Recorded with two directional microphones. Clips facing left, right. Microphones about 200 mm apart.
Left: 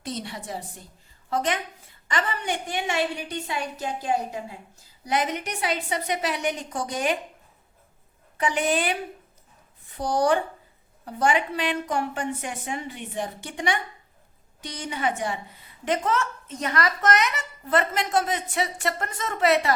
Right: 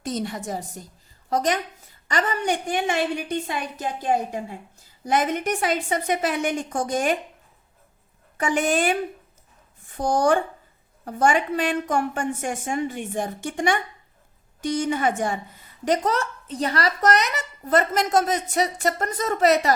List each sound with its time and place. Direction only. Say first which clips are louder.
0.0 s a woman's voice: right 5 dB; 45° right (ahead or behind)
8.4 s a woman's voice: right 2 dB; 45° right (ahead or behind)